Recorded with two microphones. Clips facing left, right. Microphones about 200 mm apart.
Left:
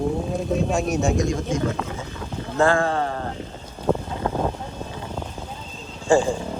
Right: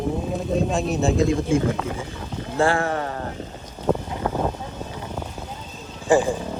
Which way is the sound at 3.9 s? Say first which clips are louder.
Even; 15° right (ahead or behind).